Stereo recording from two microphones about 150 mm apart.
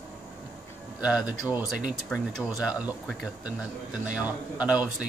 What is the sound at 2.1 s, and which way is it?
Speech, 10° left (ahead or behind).